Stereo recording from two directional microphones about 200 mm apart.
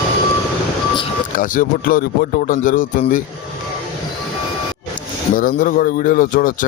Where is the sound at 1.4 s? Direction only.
45° left (ahead or behind).